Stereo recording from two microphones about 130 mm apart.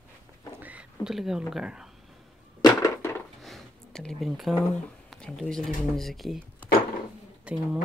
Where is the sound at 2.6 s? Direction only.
20° left (ahead or behind).